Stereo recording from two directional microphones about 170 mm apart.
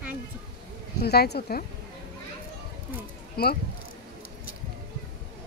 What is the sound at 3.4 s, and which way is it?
Speech, 65° left (ahead or behind).